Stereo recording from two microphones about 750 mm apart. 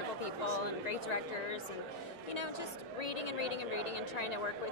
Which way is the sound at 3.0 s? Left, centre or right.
Left.